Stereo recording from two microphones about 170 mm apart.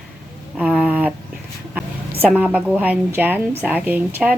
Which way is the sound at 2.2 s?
5° right (ahead or behind).